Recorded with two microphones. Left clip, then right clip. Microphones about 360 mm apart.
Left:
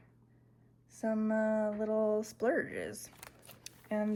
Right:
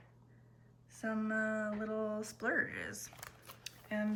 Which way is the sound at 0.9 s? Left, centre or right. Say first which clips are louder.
Left 4 dB; centre.